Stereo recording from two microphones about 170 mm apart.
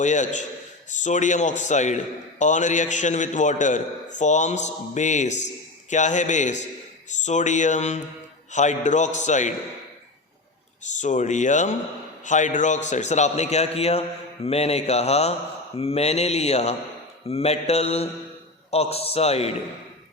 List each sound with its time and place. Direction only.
0.0 s a man's voice: 45° left (ahead or behind)
10.8 s a man's voice: 45° left (ahead or behind)